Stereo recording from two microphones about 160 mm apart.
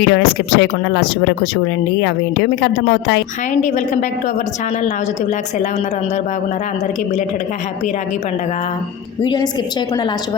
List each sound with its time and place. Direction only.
0.0 s speech: 90° left
9.2 s a woman's voice: 30° left (ahead or behind)